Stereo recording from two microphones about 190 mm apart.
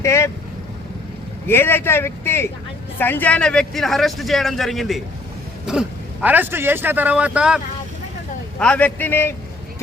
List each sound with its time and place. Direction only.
0.0 s speech: 15° left (ahead or behind)
1.5 s a man's voice: 10° left (ahead or behind)
6.2 s speech: 10° right (ahead or behind)
8.5 s speech: 5° left (ahead or behind)